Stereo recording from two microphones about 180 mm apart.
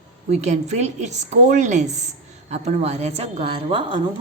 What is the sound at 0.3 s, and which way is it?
A woman's voice, 40° right (ahead or behind).